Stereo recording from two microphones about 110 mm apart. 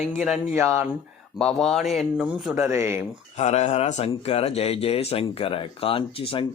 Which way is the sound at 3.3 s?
90° left.